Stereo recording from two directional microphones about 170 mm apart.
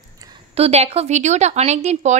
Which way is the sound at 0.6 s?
35° right (ahead or behind).